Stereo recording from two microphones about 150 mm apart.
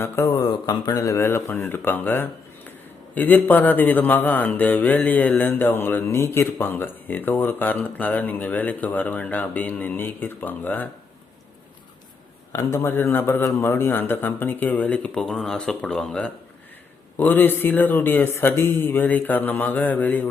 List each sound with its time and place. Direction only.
0.0 s speech: 20° left (ahead or behind)
12.5 s speech: 20° left (ahead or behind)